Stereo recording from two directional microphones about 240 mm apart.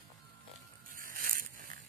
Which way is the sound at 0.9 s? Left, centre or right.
Right.